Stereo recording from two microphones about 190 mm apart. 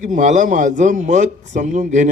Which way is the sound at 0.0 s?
40° right (ahead or behind).